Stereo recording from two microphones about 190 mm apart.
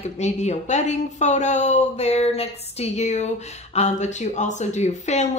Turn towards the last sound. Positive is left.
turn(degrees=35)  # may be behind; listen again after turning